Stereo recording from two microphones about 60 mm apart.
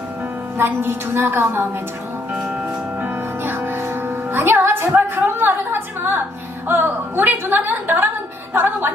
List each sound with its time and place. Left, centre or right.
0.5 s a woman's voice: right
3.0 s music: right
6.7 s a woman's voice: right